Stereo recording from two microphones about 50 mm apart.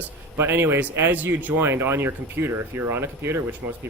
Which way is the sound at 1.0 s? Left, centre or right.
Right.